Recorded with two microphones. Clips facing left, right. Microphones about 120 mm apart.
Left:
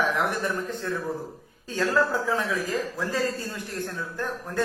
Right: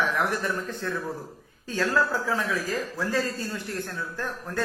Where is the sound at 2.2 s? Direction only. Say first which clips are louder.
Left 1 dB; 20° left (ahead or behind).